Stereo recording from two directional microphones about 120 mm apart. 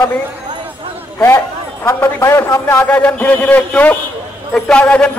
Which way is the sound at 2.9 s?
10° left (ahead or behind).